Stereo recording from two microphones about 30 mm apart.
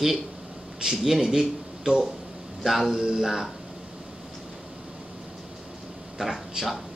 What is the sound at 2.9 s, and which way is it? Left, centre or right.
Speech, right.